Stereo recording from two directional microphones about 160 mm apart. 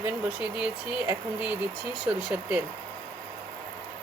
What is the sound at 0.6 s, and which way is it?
Speech, 10° right (ahead or behind).